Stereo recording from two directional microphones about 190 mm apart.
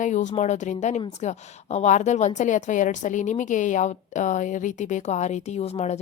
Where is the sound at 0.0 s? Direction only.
40° left (ahead or behind).